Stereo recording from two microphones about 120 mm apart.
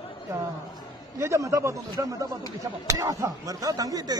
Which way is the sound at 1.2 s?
25° right (ahead or behind).